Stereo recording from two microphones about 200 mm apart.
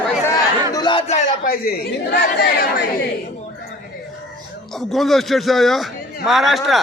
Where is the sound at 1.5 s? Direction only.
50° left (ahead or behind).